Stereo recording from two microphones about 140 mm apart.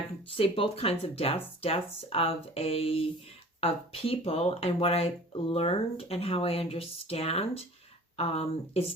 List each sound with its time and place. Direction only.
0.3 s speech: 40° left (ahead or behind)